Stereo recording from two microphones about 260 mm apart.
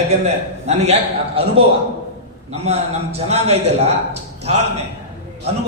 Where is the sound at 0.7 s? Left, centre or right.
Right.